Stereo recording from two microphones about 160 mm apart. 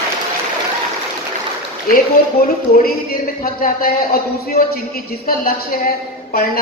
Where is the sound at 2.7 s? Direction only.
65° left (ahead or behind).